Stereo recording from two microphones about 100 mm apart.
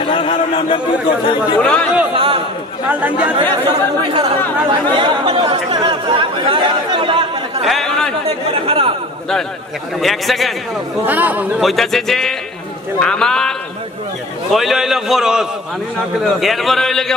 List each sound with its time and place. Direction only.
0.0 s speech: 60° left (ahead or behind)
1.6 s speech: 10° left (ahead or behind)
2.1 s speech: 70° right (ahead or behind)
2.9 s speech: 15° right (ahead or behind)
3.6 s speech: 80° right
5.5 s speech: 45° right (ahead or behind)
5.9 s speech: 60° right (ahead or behind)
7.6 s chatter: centre (ahead or behind)
8.6 s speech: 70° right (ahead or behind)
9.9 s a man's voice: centre (ahead or behind)
11.1 s speech: 15° right (ahead or behind)
11.6 s a man's voice: centre (ahead or behind)